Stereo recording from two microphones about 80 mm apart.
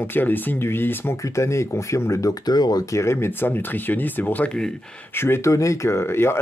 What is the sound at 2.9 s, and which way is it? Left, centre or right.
Speech, left.